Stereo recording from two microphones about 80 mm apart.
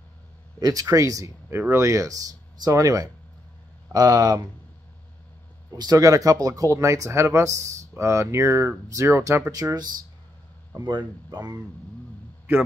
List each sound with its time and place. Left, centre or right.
0.6 s speech: right
5.8 s speech: right
9.5 s speech: right
10.8 s speech: right
11.2 s speech: right